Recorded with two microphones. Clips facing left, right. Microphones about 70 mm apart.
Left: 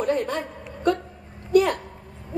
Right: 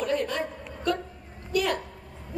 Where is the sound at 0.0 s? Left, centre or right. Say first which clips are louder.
Left 3 dB; left.